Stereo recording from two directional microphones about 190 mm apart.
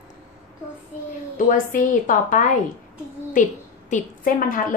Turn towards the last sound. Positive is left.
turn(degrees=45)  # may be behind; listen again after turning